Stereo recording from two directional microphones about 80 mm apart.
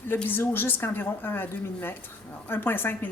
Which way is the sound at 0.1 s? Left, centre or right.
Left.